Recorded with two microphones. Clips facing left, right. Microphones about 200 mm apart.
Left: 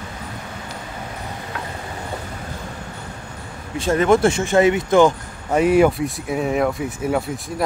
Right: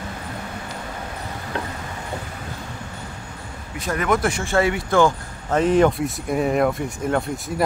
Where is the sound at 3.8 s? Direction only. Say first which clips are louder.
Left 6 dB; 25° left (ahead or behind).